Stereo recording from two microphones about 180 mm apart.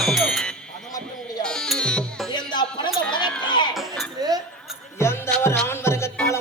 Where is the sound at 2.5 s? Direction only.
25° left (ahead or behind).